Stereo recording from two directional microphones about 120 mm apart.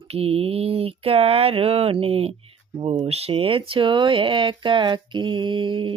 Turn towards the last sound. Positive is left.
turn(degrees=-45)  # may be behind; listen again after turning